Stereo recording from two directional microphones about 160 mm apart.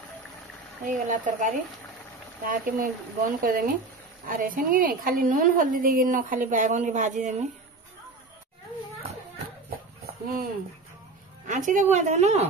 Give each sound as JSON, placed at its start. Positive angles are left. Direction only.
{"t": 0.8, "sound": "a woman's voice", "side_deg": -55}
{"t": 10.0, "sound": "a sound", "side_deg": -65}
{"t": 11.4, "sound": "speech", "side_deg": -50}